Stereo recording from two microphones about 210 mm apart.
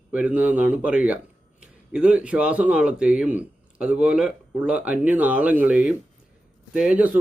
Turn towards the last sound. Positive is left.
turn(degrees=-5)  # may be behind; listen again after turning